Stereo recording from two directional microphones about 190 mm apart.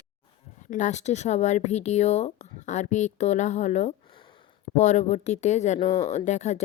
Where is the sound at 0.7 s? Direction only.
40° left (ahead or behind).